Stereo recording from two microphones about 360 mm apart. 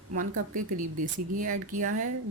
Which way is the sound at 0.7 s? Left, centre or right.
Right.